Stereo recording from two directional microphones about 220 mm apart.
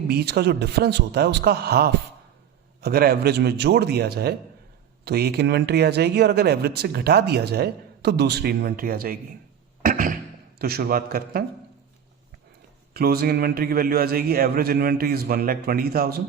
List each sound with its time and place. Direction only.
0.1 s speech: 45° right (ahead or behind)
9.8 s a sound: 40° right (ahead or behind)
10.6 s speech: 45° right (ahead or behind)
12.9 s speech: 45° right (ahead or behind)